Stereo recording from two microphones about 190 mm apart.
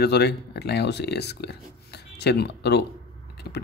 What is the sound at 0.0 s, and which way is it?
Speech, 60° left (ahead or behind).